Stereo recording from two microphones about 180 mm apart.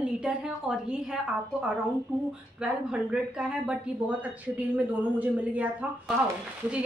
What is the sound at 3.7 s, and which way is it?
Speech, 10° right (ahead or behind).